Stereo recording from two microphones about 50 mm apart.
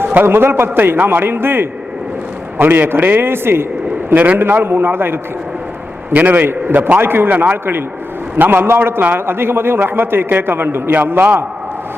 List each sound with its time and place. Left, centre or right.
0.1 s a man's voice: right
4.1 s a man's voice: right
6.1 s a man's voice: right
7.0 s a man's voice: right
7.3 s a man's voice: right
8.4 s a man's voice: right